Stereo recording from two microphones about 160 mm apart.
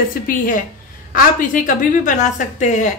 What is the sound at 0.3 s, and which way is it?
A woman's voice, 60° left (ahead or behind).